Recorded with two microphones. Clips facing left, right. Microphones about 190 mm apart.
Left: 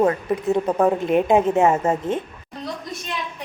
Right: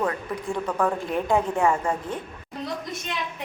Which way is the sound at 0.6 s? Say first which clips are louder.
Left 5 dB; 35° left (ahead or behind).